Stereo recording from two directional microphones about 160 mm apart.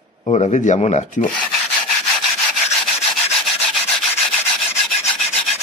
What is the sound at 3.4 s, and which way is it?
Rub, centre (ahead or behind).